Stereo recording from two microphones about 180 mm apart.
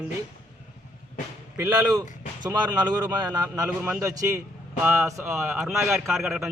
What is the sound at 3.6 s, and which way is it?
A man's voice, 5° right (ahead or behind).